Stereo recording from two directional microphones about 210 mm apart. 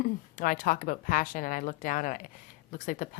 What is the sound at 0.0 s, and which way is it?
A woman's voice, 40° left (ahead or behind).